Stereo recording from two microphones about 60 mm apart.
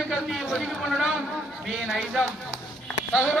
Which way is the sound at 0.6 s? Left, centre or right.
Centre.